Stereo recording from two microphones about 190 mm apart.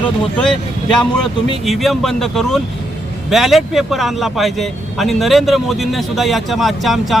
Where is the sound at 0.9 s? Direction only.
5° left (ahead or behind).